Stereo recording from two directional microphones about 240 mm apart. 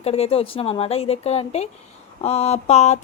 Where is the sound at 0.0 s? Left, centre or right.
Left.